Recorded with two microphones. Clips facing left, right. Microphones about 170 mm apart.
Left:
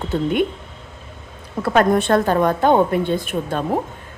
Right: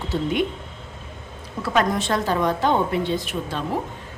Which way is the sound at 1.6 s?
55° left (ahead or behind).